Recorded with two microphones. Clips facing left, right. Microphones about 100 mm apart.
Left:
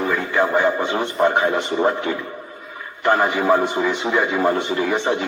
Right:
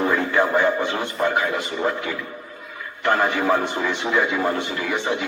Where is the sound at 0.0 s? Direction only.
Centre (ahead or behind).